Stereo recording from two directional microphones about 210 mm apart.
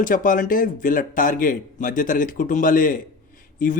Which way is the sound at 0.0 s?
40° left (ahead or behind).